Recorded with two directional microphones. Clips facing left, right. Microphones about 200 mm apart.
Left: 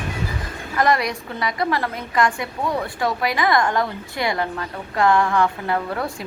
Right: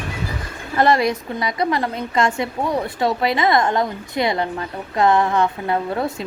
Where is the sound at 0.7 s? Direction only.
25° right (ahead or behind).